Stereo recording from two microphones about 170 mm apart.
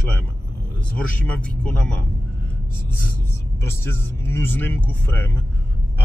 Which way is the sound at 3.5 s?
15° left (ahead or behind).